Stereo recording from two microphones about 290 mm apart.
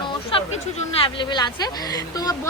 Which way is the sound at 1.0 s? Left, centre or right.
Centre.